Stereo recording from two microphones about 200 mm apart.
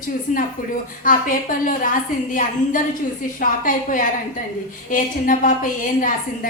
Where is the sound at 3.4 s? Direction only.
40° left (ahead or behind).